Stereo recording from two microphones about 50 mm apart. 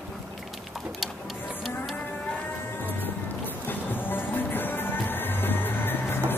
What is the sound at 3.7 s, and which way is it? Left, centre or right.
Music, left.